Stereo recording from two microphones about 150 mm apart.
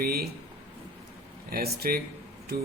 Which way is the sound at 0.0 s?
90° right.